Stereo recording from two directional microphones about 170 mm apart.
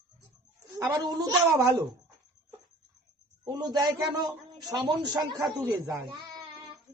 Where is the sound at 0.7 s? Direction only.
20° right (ahead or behind).